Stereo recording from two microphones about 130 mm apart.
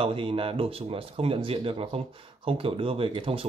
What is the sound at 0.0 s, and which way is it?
Speech, 40° right (ahead or behind).